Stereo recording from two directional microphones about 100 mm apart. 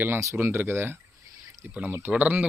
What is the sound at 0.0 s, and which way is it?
A man's voice, 25° right (ahead or behind).